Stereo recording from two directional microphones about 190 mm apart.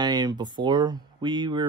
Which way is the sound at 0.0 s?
20° right (ahead or behind).